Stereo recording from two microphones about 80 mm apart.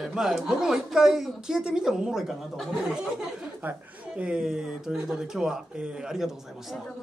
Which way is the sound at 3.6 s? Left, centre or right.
Right.